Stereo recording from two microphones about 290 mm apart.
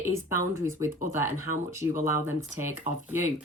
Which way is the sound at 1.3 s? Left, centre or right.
Left.